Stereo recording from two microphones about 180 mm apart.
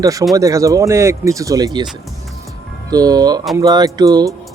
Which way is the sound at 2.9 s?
20° right (ahead or behind).